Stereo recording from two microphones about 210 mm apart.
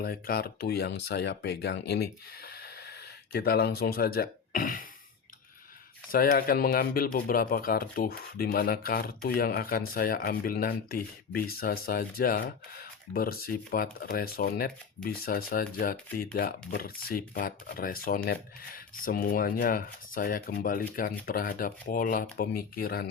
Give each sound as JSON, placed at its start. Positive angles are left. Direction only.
{"t": 0.0, "sound": "speech", "side_deg": 45}
{"t": 6.1, "sound": "speech", "side_deg": 45}